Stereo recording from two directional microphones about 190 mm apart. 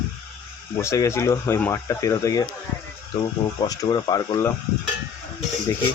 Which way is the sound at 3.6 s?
20° left (ahead or behind).